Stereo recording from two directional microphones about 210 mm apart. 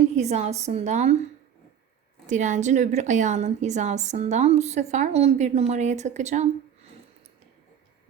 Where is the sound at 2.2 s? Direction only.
35° right (ahead or behind).